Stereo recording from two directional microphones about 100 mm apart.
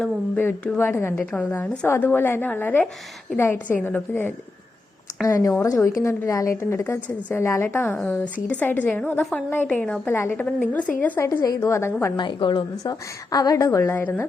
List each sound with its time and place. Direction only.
0.3 s a woman's voice: 15° left (ahead or behind)
5.2 s a woman's voice: 35° left (ahead or behind); by 10.0 s 10° left (ahead or behind)
10.1 s a woman's voice: 20° left (ahead or behind)
11.2 s a woman's voice: 30° left (ahead or behind)
12.1 s a woman's voice: 50° left (ahead or behind)
12.8 s a woman's voice: 40° left (ahead or behind); by 14.3 s 20° left (ahead or behind)